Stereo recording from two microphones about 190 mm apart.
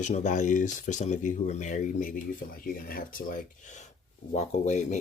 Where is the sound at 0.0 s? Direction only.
40° left (ahead or behind).